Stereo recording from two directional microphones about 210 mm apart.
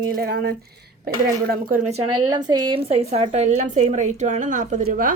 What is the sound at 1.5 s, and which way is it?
Speech, 40° right (ahead or behind).